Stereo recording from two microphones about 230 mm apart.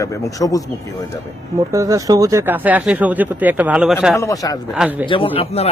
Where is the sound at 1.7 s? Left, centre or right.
Centre.